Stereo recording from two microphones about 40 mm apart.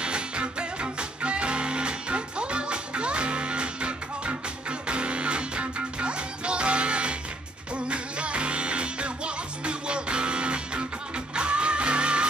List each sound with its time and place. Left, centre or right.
0.0 s music: right